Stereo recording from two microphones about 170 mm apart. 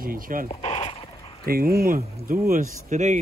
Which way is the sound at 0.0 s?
55° right (ahead or behind).